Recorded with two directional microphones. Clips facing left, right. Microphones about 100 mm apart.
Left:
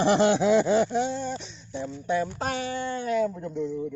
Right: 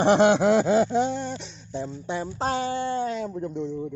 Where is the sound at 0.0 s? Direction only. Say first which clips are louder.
Right 3 dB; 55° right (ahead or behind).